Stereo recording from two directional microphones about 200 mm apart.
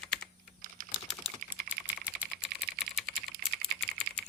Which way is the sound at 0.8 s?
45° right (ahead or behind).